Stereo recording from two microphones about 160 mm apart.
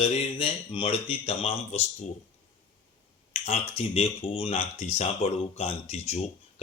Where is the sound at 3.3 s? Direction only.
40° left (ahead or behind).